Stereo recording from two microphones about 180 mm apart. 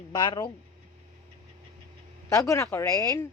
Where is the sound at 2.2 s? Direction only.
15° left (ahead or behind).